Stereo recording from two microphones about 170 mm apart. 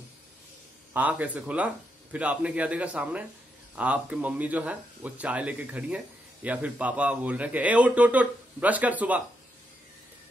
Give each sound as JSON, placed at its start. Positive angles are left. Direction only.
{"t": 0.9, "sound": "speech", "side_deg": -10}